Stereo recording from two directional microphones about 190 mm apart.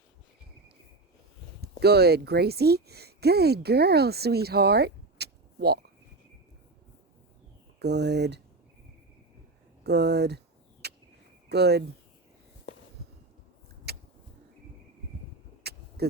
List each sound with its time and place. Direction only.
1.6 s speech: 55° right (ahead or behind)
7.8 s speech: 60° right (ahead or behind)
9.8 s speech: 60° right (ahead or behind)
10.8 s a sound: 60° right (ahead or behind)
11.4 s speech: 60° right (ahead or behind)
13.9 s vehicle: 60° right (ahead or behind)
15.6 s vehicle: 55° right (ahead or behind)